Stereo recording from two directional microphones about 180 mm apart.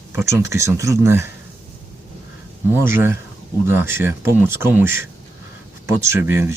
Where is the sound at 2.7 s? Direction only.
15° right (ahead or behind).